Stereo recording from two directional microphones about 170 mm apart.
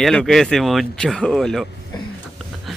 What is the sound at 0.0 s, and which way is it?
Speech, centre (ahead or behind).